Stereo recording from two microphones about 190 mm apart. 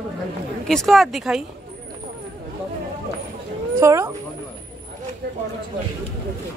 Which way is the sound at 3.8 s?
15° right (ahead or behind).